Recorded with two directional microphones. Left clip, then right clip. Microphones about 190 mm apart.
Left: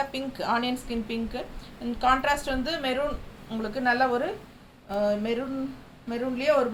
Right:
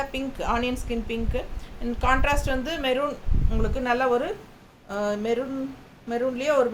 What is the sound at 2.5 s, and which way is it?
A woman's voice, 20° right (ahead or behind).